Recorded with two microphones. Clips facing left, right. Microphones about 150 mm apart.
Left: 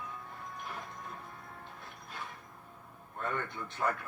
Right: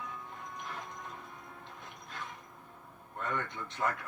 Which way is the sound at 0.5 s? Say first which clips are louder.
Even; 20° right (ahead or behind).